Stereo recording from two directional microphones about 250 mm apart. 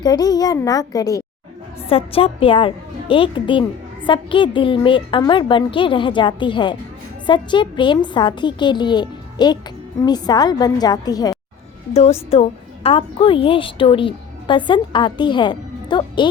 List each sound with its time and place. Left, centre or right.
0.0 s a woman's voice: centre